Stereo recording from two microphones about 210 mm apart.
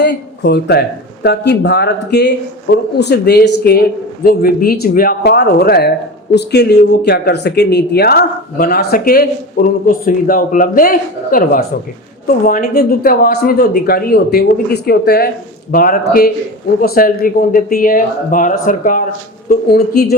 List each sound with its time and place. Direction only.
0.0 s speech: 55° left (ahead or behind)